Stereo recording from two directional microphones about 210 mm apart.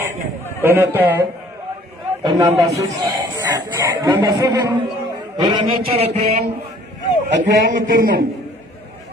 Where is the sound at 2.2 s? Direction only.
20° right (ahead or behind).